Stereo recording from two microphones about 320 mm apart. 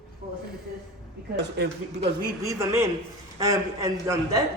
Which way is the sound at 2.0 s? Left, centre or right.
Centre.